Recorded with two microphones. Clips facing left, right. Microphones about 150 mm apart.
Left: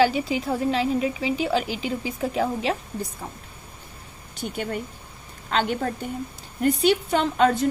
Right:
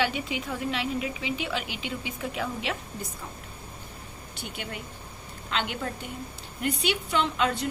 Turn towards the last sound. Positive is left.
turn(degrees=45)  # may be behind; listen again after turning